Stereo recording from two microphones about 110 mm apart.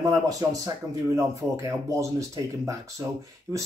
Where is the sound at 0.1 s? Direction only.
35° right (ahead or behind).